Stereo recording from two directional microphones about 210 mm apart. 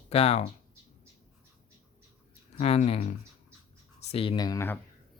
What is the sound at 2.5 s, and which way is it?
Speech, 30° left (ahead or behind).